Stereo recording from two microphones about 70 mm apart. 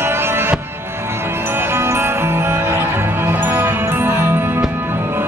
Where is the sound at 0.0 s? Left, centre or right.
Right.